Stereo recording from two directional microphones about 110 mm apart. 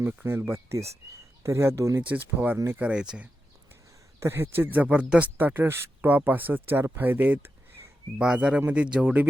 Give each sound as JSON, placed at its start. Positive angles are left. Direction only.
{"t": 0.0, "sound": "speech", "side_deg": -20}
{"t": 2.0, "sound": "speech", "side_deg": -15}
{"t": 2.8, "sound": "speech", "side_deg": -10}
{"t": 4.2, "sound": "speech", "side_deg": -20}